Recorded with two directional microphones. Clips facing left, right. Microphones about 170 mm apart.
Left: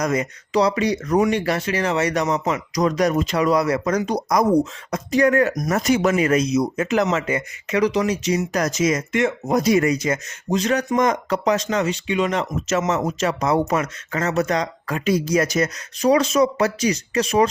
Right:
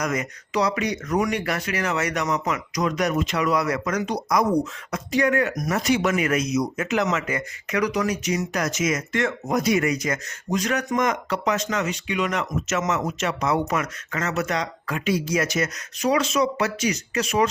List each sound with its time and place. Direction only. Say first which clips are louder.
0.0 s speech: left 4 dB; 30° left (ahead or behind)